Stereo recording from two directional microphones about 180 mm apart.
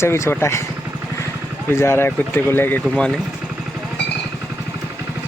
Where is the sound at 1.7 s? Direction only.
15° left (ahead or behind).